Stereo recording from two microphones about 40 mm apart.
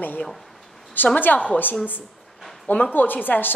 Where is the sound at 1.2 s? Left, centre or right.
Left.